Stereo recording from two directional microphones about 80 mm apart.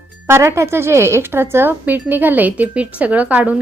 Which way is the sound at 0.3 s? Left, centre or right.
Right.